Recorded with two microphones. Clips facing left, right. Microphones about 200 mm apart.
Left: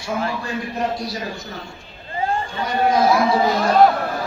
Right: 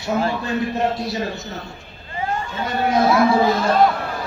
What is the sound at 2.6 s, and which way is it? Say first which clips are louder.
A man's voice: left 1 dB; 25° right (ahead or behind).